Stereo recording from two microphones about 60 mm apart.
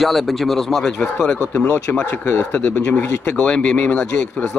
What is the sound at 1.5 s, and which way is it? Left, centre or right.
Speech, left.